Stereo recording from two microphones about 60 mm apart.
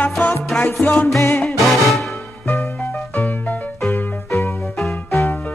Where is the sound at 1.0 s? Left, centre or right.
Left.